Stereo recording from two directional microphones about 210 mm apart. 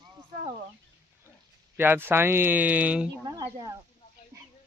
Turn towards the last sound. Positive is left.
turn(degrees=-20)  # may be behind; listen again after turning